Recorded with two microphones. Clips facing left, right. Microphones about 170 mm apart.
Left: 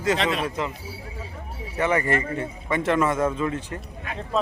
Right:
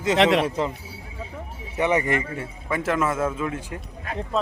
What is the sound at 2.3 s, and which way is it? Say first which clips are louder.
A man's voice: left 2 dB; centre (ahead or behind).